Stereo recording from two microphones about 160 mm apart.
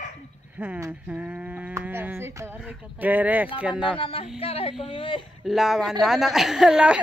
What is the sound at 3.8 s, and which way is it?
Speech, 35° left (ahead or behind).